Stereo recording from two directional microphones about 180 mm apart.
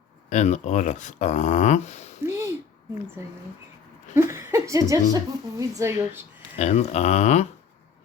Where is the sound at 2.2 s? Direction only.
15° right (ahead or behind).